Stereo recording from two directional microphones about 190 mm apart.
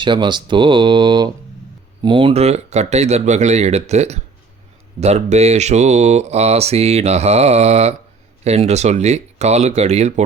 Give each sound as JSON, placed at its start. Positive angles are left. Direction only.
{"t": 0.0, "sound": "speech", "side_deg": -25}